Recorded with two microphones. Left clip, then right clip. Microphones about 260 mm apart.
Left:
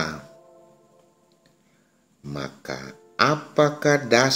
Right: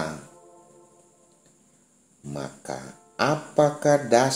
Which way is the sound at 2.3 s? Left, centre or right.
Left.